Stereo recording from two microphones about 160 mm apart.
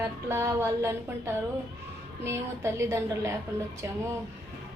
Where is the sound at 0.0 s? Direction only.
15° right (ahead or behind).